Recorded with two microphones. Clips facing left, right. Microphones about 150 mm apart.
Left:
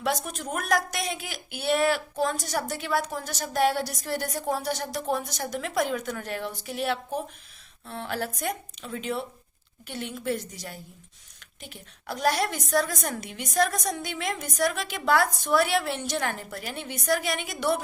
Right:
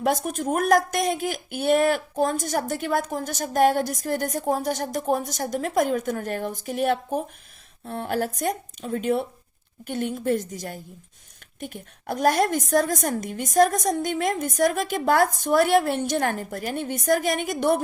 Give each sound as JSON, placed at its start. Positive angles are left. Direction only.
{"t": 0.0, "sound": "speech", "side_deg": -50}